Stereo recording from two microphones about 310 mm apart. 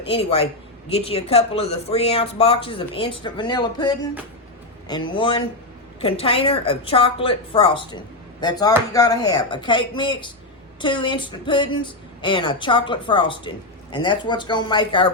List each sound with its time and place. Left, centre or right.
0.1 s a man's voice: centre